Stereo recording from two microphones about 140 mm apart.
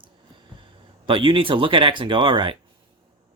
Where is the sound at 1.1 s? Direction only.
35° right (ahead or behind).